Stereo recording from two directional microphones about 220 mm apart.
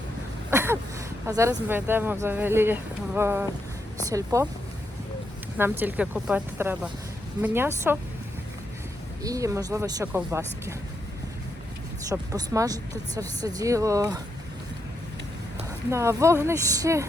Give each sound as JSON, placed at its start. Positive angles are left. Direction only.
{"t": 0.5, "sound": "a sound", "side_deg": -10}
{"t": 1.3, "sound": "speech", "side_deg": -15}
{"t": 5.5, "sound": "speech", "side_deg": -10}
{"t": 9.2, "sound": "speech", "side_deg": -15}
{"t": 12.0, "sound": "speech", "side_deg": -15}
{"t": 15.9, "sound": "speech", "side_deg": -10}